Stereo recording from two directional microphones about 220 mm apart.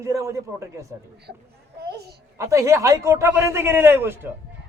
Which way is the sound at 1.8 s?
45° right (ahead or behind).